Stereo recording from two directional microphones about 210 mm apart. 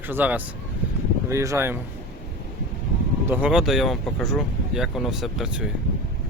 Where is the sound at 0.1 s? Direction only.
10° right (ahead or behind).